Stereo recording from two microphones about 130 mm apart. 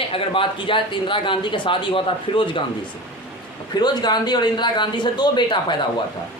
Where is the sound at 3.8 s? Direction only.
35° left (ahead or behind).